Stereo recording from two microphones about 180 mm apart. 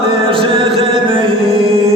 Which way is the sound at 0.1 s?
30° right (ahead or behind).